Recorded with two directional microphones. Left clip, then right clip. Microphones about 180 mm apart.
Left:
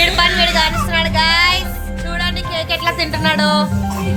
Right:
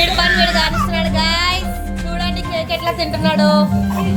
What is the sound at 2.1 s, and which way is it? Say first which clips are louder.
Music: left 1 dB; centre (ahead or behind).